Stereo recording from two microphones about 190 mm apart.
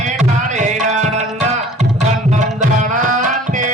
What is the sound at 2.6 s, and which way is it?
Music, 40° right (ahead or behind).